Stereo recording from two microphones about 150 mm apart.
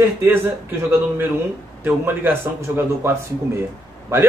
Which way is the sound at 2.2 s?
15° right (ahead or behind).